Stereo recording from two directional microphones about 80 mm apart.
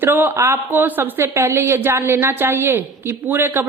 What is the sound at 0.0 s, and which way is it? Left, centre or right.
A woman's voice, right.